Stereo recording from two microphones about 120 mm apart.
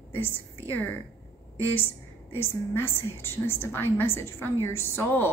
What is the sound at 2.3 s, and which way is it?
A woman's voice, 20° left (ahead or behind).